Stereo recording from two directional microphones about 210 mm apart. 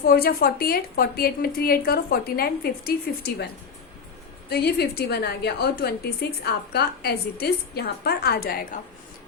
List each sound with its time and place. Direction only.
0.0 s a woman's voice: 45° left (ahead or behind)